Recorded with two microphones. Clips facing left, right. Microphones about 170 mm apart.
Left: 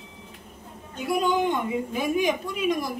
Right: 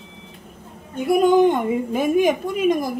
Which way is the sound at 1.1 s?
50° right (ahead or behind).